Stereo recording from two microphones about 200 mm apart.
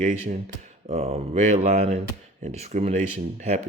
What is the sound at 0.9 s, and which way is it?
Speech, 35° right (ahead or behind).